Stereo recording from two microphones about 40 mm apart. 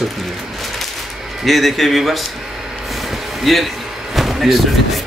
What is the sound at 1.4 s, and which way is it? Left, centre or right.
Speech, centre.